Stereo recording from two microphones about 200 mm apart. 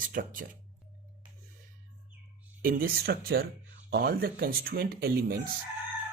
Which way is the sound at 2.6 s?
45° right (ahead or behind).